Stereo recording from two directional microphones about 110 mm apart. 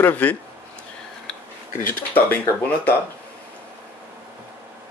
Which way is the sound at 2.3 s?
15° left (ahead or behind).